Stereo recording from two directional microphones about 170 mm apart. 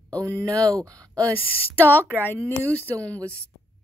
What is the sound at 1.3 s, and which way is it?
Speech, 10° left (ahead or behind).